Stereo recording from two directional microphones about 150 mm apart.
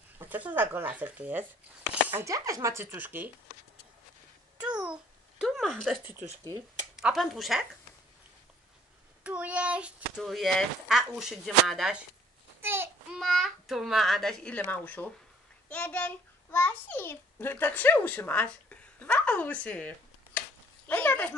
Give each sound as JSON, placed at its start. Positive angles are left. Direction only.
{"t": 0.2, "sound": "chopping", "side_deg": -10}
{"t": 4.6, "sound": "babbling", "side_deg": -5}
{"t": 7.0, "sound": "a child's voice", "side_deg": 0}
{"t": 9.2, "sound": "a child's voice", "side_deg": -10}
{"t": 12.6, "sound": "a sound", "side_deg": -15}
{"t": 13.1, "sound": "a child's voice", "side_deg": 0}
{"t": 20.3, "sound": "a sound", "side_deg": 10}